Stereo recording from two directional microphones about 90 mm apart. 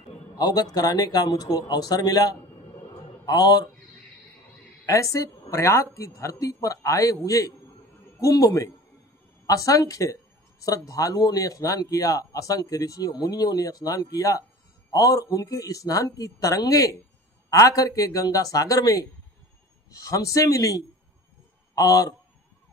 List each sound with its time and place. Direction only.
0.4 s speech: 45° left (ahead or behind)
2.9 s a sound: 50° left (ahead or behind)
4.8 s a man's voice: 35° left (ahead or behind)
20.1 s a man's voice: 35° left (ahead or behind)